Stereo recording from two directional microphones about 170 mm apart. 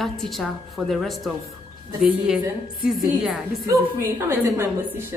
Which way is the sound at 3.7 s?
15° right (ahead or behind).